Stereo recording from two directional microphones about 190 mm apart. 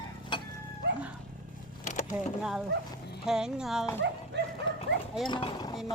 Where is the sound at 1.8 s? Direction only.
40° left (ahead or behind).